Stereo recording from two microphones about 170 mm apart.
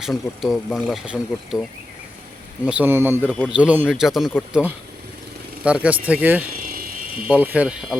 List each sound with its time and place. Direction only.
0.0 s speech: centre (ahead or behind)
2.6 s speech: 10° right (ahead or behind)
3.2 s a man's voice: 5° left (ahead or behind)
3.5 s speech: 10° right (ahead or behind)
5.6 s speech: 5° right (ahead or behind)
6.6 s a sound: 60° right (ahead or behind)
7.3 s speech: 10° right (ahead or behind)